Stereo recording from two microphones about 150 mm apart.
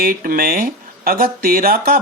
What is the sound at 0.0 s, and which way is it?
Speech, 75° right (ahead or behind).